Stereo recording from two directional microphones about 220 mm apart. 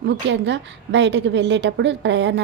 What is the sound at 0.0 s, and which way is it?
A woman's voice, 55° right (ahead or behind).